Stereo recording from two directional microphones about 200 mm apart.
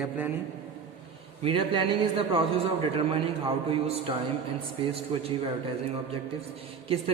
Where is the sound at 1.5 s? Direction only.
25° right (ahead or behind).